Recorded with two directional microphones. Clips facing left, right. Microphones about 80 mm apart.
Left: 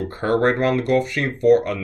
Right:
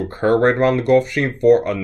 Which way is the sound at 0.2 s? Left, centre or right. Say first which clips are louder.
Right 4 dB; right.